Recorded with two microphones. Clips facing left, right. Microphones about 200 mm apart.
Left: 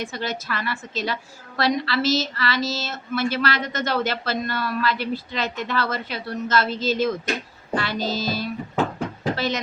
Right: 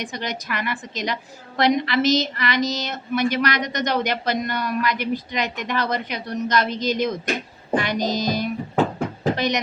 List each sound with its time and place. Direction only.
0.0 s a woman's voice: 15° right (ahead or behind)
7.8 s music: 15° right (ahead or behind)
9.3 s a sound: 15° right (ahead or behind)